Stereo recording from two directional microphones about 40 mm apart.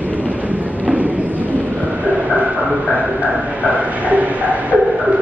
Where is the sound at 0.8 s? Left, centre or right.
Right.